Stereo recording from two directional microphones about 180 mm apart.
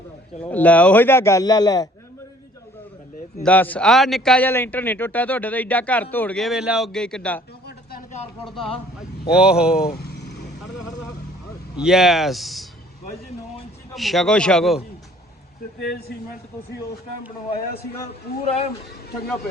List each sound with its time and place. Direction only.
0.4 s speech: 10° left (ahead or behind)
3.4 s speech: 10° left (ahead or behind)
9.3 s speech: 5° right (ahead or behind)
9.8 s vehicle: 60° left (ahead or behind)
11.8 s speech: centre (ahead or behind)
13.9 s speech: centre (ahead or behind)
15.9 s a man's voice: 60° left (ahead or behind)
18.4 s speech: 35° left (ahead or behind)